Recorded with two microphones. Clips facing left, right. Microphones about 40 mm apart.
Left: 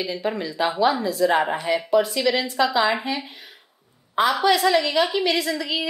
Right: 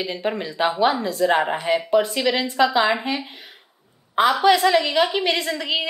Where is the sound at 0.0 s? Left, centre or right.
Right.